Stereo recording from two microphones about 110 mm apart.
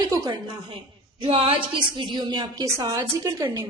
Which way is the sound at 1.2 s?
55° right (ahead or behind).